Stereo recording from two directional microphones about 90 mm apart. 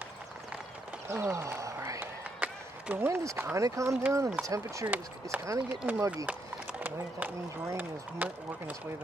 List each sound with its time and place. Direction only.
1.0 s a sound: 30° right (ahead or behind)
2.4 s run: 20° right (ahead or behind)
3.1 s speech: 25° right (ahead or behind)
4.8 s speech: 20° right (ahead or behind)
5.4 s speech: 30° right (ahead or behind)
6.0 s speech: 15° right (ahead or behind)